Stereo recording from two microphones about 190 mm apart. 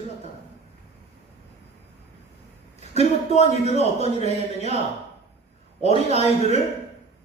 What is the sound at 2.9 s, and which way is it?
A man's voice, 35° left (ahead or behind).